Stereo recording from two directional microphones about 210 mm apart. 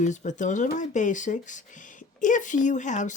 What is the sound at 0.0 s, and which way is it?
Speech, 35° left (ahead or behind).